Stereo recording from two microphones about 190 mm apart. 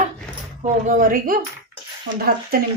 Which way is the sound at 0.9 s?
45° right (ahead or behind).